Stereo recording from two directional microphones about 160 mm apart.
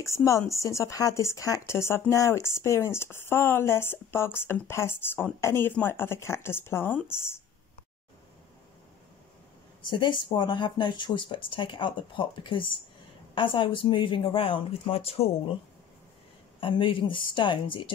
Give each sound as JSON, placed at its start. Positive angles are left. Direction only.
{"t": 0.0, "sound": "speech", "side_deg": 20}
{"t": 9.8, "sound": "speech", "side_deg": 30}
{"t": 16.5, "sound": "speech", "side_deg": 35}